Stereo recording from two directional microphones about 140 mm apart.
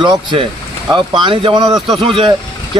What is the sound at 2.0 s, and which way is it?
Speech, 35° right (ahead or behind).